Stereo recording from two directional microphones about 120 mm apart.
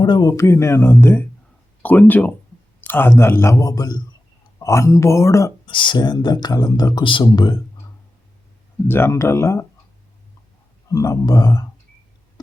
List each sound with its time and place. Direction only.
0.0 s speech: 35° left (ahead or behind)
5.6 s speech: 40° left (ahead or behind)
8.9 s speech: 20° left (ahead or behind)
10.8 s speech: 30° left (ahead or behind)